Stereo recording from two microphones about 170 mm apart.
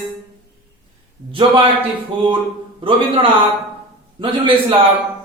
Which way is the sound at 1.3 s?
30° right (ahead or behind).